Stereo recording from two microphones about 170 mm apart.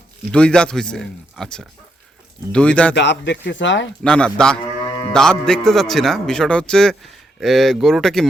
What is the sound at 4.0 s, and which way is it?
A man's voice, 5° left (ahead or behind).